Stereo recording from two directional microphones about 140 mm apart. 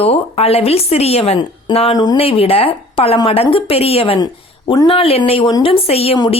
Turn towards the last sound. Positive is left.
turn(degrees=45)  # may be behind; listen again after turning